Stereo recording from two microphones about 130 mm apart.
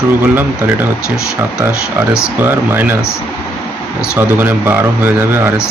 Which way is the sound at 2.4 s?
15° right (ahead or behind).